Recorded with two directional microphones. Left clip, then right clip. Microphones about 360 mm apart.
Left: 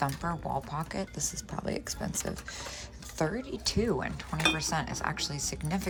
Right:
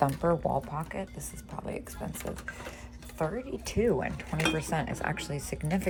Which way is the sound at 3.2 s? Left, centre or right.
Centre.